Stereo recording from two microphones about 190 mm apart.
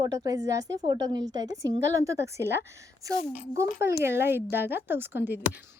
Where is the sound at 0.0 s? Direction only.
20° right (ahead or behind).